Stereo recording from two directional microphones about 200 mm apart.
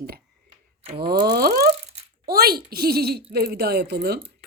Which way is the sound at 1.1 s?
50° right (ahead or behind).